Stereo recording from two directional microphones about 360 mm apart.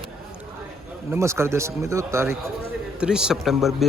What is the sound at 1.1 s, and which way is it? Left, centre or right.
A man's voice, centre.